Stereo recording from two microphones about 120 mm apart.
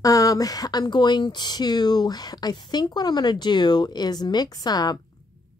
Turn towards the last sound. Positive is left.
turn(degrees=35)  # may be behind; listen again after turning